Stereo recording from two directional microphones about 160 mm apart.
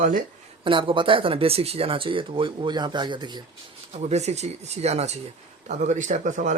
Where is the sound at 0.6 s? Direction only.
30° right (ahead or behind).